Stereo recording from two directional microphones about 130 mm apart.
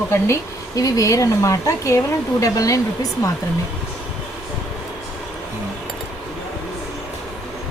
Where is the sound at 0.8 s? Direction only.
25° left (ahead or behind).